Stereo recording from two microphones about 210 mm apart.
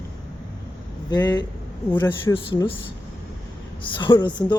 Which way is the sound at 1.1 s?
20° left (ahead or behind).